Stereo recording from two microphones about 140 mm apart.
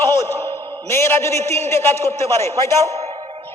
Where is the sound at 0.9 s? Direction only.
15° left (ahead or behind).